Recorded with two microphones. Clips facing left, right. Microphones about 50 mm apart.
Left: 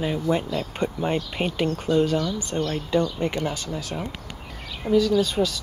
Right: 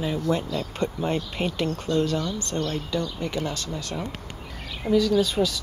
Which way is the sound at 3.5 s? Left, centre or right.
Centre.